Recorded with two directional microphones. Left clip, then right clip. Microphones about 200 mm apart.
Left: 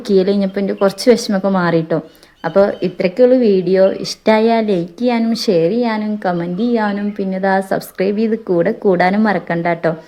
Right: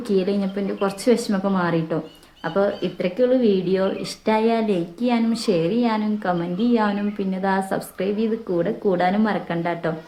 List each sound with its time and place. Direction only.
0.1 s speech: 30° left (ahead or behind)